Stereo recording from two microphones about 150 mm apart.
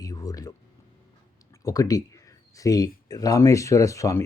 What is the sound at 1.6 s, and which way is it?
Speech, 25° left (ahead or behind).